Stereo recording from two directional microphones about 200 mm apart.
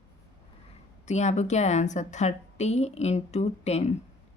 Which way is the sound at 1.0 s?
35° left (ahead or behind).